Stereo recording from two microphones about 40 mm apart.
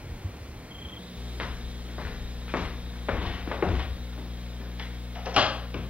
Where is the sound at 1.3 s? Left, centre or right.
Right.